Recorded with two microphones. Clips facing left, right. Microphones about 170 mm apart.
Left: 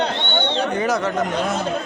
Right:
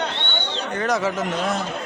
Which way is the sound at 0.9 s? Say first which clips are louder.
Left 2 dB; 5° right (ahead or behind).